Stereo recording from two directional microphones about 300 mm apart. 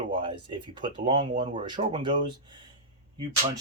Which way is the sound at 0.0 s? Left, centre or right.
Centre.